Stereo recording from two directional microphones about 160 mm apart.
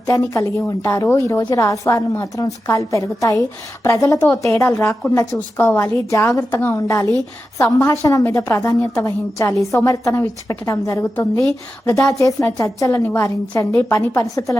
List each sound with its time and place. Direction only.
0.1 s a woman's voice: 20° left (ahead or behind)